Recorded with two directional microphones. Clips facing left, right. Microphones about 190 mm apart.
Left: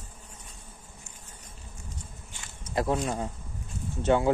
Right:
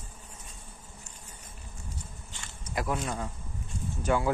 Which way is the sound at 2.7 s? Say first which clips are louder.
Left 4 dB; 30° left (ahead or behind).